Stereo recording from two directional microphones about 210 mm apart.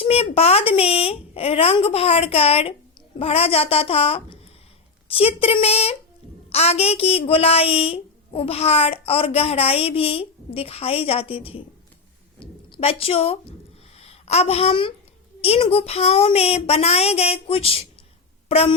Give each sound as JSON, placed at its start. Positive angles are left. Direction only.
{"t": 0.0, "sound": "a woman's voice", "side_deg": 30}